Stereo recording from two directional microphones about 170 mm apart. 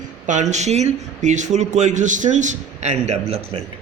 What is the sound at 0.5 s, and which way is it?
Speech, 40° right (ahead or behind).